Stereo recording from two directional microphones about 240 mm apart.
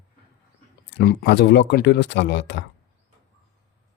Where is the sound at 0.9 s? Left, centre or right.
Left.